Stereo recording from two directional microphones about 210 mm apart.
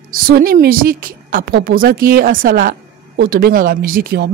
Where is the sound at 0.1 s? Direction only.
45° right (ahead or behind).